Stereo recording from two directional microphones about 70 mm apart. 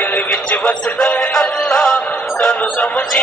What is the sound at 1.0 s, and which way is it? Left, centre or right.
Music, centre.